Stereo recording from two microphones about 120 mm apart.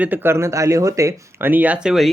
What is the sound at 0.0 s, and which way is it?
Speech, 15° right (ahead or behind).